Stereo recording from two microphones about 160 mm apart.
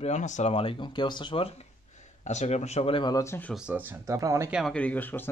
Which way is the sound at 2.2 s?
45° left (ahead or behind).